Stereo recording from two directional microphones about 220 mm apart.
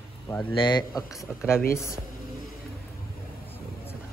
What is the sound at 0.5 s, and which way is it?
Speech, 20° left (ahead or behind).